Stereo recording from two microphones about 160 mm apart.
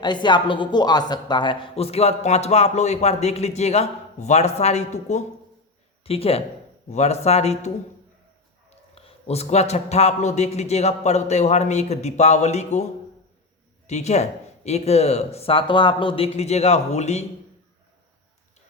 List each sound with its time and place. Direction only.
0.0 s speech: 30° left (ahead or behind)
8.7 s a man's voice: 40° left (ahead or behind)